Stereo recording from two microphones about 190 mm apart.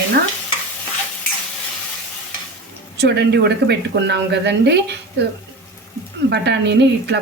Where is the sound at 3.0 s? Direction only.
60° right (ahead or behind).